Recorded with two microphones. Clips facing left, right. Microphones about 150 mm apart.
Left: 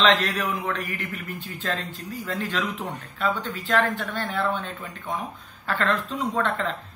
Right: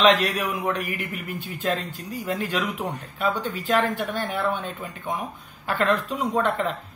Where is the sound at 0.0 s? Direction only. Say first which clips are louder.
Right 2 dB; 10° right (ahead or behind).